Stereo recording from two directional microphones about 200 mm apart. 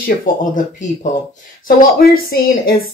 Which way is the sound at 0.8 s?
40° left (ahead or behind).